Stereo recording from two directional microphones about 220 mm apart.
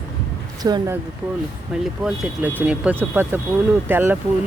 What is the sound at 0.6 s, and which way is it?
Speech, 15° right (ahead or behind).